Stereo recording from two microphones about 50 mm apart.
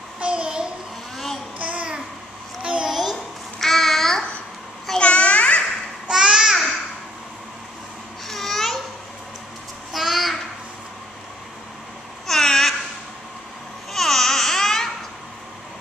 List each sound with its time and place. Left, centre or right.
0.2 s child singing: centre
1.1 s a sound: centre
1.6 s babbling: right
2.6 s a sound: centre
2.9 s babbling: centre
4.9 s babbling: left
6.0 s babbling: centre
8.3 s babbling: centre
9.9 s child singing: centre
12.3 s babbling: centre
13.9 s babbling: centre